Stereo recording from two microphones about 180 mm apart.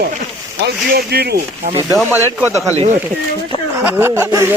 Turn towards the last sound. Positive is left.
turn(degrees=-15)  # may be behind; listen again after turning